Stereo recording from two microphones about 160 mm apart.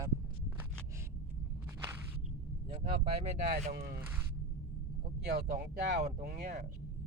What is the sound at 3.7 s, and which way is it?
Speech, 75° right (ahead or behind).